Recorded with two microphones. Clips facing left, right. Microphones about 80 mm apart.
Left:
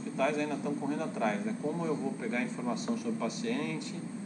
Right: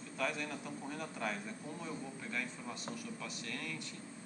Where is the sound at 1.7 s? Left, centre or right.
Left.